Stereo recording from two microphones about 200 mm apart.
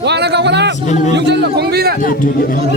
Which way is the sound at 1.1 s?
60° right (ahead or behind).